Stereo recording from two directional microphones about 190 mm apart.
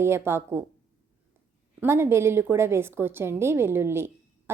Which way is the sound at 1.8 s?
10° right (ahead or behind).